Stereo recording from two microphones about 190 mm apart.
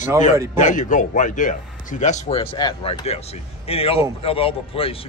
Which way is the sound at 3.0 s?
35° left (ahead or behind).